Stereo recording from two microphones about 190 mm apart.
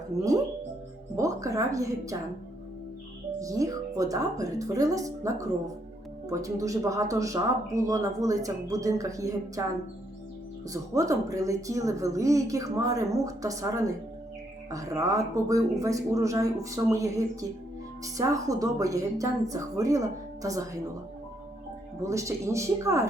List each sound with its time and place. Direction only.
0.1 s speech: 20° right (ahead or behind)
3.4 s speech: 15° right (ahead or behind)
10.7 s speech: 15° right (ahead or behind)
22.0 s speech: 15° right (ahead or behind)